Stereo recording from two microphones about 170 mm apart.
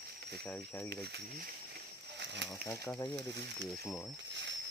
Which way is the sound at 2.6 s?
20° left (ahead or behind).